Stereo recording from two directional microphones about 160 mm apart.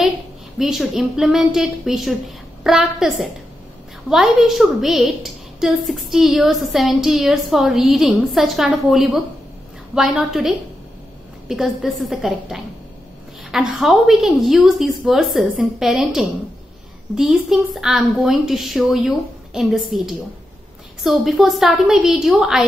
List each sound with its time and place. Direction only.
0.6 s a woman's voice: centre (ahead or behind)